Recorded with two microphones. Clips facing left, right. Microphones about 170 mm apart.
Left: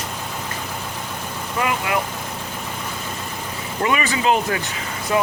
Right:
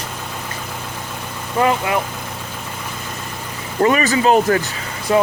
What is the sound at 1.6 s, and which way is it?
Speech, 35° right (ahead or behind).